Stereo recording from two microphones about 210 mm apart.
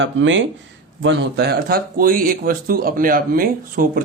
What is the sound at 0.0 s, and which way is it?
Speech, 60° right (ahead or behind).